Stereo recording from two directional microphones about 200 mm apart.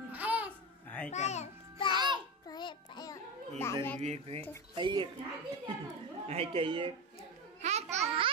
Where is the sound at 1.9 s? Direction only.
20° right (ahead or behind).